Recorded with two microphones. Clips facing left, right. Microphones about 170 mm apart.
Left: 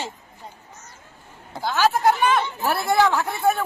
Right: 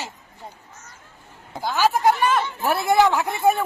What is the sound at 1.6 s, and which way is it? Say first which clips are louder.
Speech: even; 10° right (ahead or behind).